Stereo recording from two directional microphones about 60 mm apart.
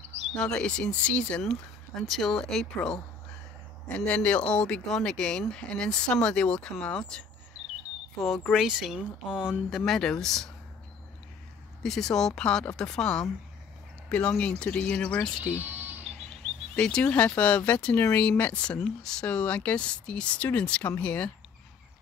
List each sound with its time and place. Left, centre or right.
0.3 s speech: centre
1.4 s speech: centre
3.9 s speech: left
8.5 s speech: centre
9.7 s speech: centre
11.8 s speech: centre
14.0 s speech: left
15.6 s a sound: right
16.7 s speech: centre